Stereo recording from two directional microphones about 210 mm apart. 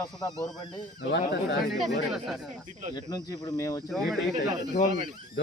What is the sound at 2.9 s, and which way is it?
Speech, 20° left (ahead or behind).